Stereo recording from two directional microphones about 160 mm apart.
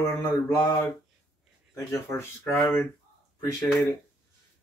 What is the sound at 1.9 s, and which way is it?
Speech, 15° left (ahead or behind).